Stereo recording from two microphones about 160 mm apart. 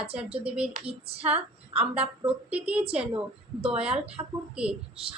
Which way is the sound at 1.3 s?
40° right (ahead or behind).